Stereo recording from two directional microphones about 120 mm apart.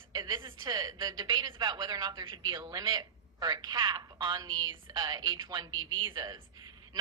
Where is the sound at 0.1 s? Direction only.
35° right (ahead or behind).